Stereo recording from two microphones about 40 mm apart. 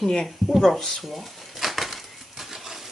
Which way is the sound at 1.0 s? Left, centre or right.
Centre.